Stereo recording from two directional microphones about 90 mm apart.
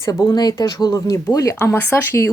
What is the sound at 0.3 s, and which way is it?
Speech, 50° left (ahead or behind).